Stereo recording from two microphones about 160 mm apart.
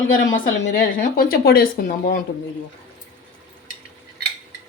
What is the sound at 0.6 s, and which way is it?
Speech, 65° left (ahead or behind).